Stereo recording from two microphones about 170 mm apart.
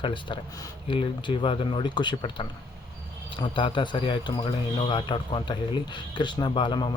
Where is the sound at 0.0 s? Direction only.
30° left (ahead or behind).